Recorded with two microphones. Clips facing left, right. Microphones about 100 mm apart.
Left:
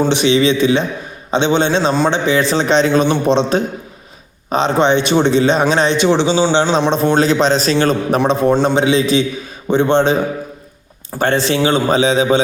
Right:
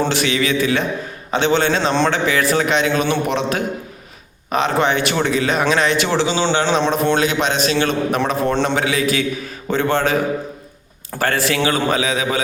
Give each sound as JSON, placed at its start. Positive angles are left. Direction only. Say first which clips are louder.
{"t": 0.1, "sound": "a man's voice", "louder": "left 6 dB", "side_deg": 20}
{"t": 7.1, "sound": "a man's voice", "louder": "left 5 dB", "side_deg": 35}
{"t": 8.3, "sound": "a man's voice", "louder": "left 5 dB", "side_deg": 25}